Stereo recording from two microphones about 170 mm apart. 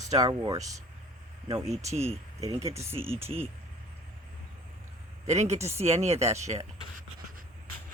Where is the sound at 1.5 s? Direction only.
35° right (ahead or behind).